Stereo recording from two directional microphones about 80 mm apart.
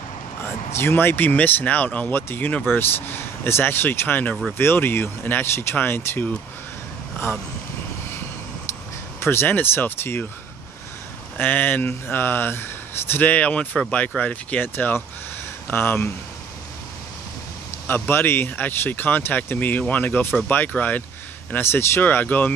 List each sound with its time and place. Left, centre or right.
0.7 s speech: left
9.2 s speech: left
11.3 s speech: left
17.8 s speech: left